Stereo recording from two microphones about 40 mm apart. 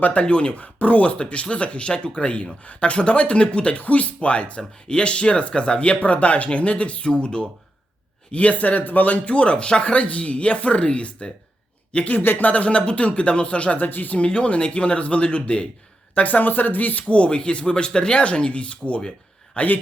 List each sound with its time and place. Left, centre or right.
0.0 s speech: left
1.2 s speech: left
8.3 s speech: left
12.2 s speech: left
12.5 s speech: left
13.7 s speech: left
14.2 s speech: left
16.1 s speech: left
17.1 s speech: left
19.5 s speech: left